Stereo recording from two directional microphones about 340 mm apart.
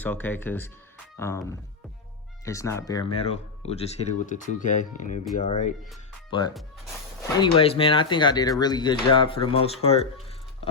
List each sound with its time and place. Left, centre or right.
0.0 s speech: centre
7.2 s speech: centre